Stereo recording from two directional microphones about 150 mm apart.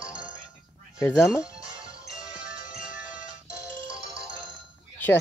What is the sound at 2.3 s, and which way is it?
Music, 5° right (ahead or behind).